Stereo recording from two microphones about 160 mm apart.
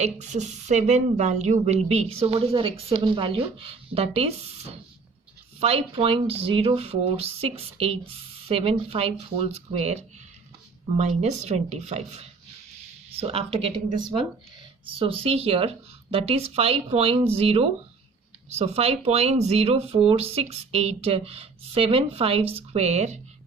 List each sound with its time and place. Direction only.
0.0 s a woman's voice: 45° right (ahead or behind)
14.8 s a woman's voice: 35° right (ahead or behind)